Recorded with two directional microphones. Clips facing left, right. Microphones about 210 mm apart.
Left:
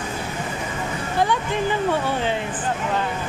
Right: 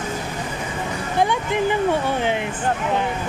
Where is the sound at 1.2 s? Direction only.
15° right (ahead or behind).